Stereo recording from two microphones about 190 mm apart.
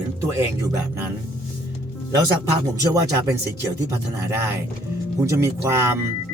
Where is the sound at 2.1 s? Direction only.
20° right (ahead or behind).